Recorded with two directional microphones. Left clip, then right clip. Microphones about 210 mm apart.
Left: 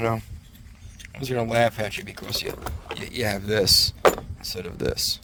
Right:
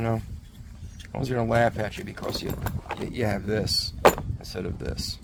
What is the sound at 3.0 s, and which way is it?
Speech, 50° left (ahead or behind).